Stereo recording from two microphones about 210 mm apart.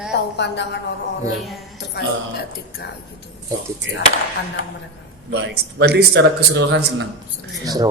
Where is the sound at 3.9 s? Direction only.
60° right (ahead or behind).